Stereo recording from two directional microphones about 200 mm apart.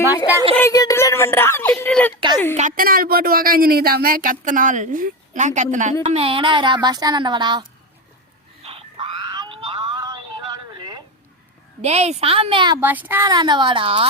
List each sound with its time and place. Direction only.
0.5 s speech: 15° left (ahead or behind)
2.6 s speech: 40° right (ahead or behind); by 7.7 s 20° right (ahead or behind)
8.6 s a sound: 25° right (ahead or behind)
11.8 s a woman's voice: 30° right (ahead or behind)
12.8 s a woman's voice: 10° right (ahead or behind); by 14.1 s 25° right (ahead or behind)